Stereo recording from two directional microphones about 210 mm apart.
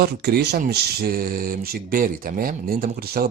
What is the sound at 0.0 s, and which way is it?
Speech, 50° right (ahead or behind).